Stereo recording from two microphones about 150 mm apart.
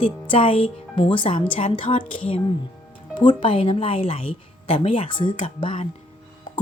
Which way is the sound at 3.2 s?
35° left (ahead or behind).